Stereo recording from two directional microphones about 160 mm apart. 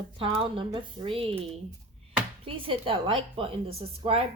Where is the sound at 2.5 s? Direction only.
35° right (ahead or behind).